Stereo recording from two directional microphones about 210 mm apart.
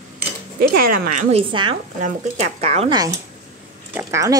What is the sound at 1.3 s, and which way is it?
A woman's voice, 25° right (ahead or behind).